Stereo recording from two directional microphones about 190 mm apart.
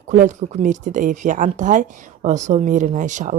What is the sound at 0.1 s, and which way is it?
A woman's voice, 40° right (ahead or behind).